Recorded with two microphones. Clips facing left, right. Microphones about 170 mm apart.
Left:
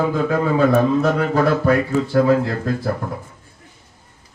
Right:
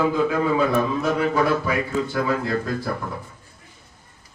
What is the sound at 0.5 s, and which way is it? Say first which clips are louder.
Speech: left 5 dB; 50° left (ahead or behind).